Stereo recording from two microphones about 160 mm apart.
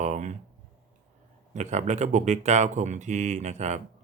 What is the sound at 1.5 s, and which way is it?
Speech, 45° right (ahead or behind).